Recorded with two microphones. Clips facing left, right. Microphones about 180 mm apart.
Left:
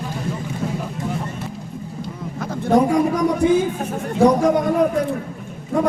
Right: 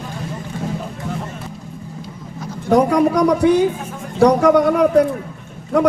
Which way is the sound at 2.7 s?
75° right (ahead or behind).